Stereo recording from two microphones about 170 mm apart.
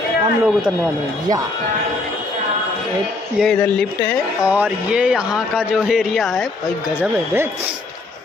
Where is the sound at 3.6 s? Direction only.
10° left (ahead or behind).